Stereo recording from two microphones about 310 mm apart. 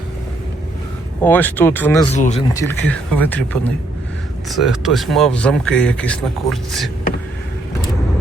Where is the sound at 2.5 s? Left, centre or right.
Centre.